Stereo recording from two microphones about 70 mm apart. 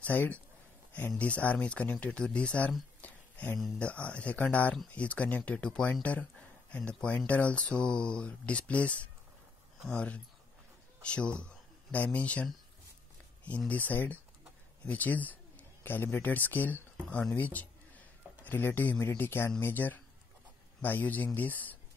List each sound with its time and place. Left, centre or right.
0.0 s speech: left
3.0 s a sound: left
3.8 s speech: centre
13.7 s speech: left